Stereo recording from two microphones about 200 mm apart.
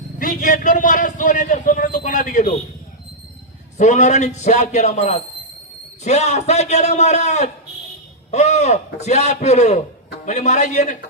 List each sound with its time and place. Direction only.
0.2 s a man's voice: 40° left (ahead or behind)
3.8 s a man's voice: 35° left (ahead or behind)